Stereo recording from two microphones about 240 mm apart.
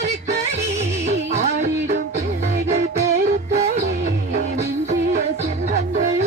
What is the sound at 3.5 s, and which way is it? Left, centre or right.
Music, right.